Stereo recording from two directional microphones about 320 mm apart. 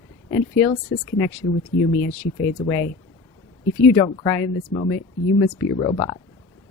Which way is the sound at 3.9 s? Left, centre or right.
Centre.